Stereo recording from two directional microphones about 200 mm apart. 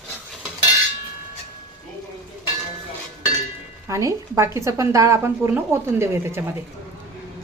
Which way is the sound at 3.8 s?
15° right (ahead or behind).